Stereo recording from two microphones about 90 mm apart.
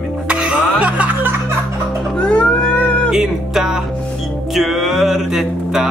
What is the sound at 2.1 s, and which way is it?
Cat, 10° left (ahead or behind).